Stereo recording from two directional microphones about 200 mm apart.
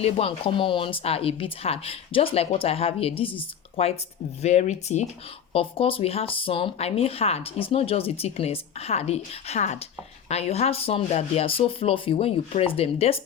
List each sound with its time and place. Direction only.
0.0 s a woman's voice: 30° left (ahead or behind)